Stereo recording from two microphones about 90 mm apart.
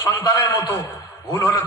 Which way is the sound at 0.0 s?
35° left (ahead or behind).